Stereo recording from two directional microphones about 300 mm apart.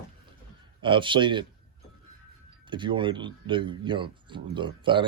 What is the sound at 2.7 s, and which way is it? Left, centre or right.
Speech, centre.